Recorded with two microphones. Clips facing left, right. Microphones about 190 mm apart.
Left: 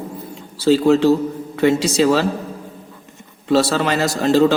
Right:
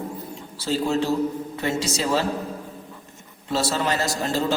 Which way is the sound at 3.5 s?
75° left (ahead or behind).